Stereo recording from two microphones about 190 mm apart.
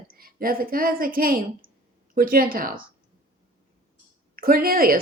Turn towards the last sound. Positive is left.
turn(degrees=-50)  # may be behind; listen again after turning